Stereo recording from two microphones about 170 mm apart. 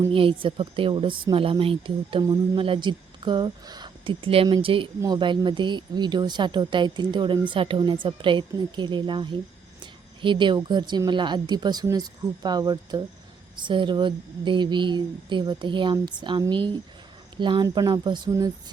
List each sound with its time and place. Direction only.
0.1 s speech: 30° right (ahead or behind)